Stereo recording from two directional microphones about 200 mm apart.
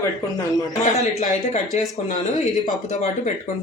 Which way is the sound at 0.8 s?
35° left (ahead or behind).